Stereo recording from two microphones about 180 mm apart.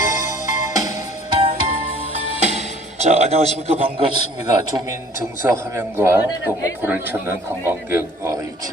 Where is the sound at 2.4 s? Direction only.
35° right (ahead or behind).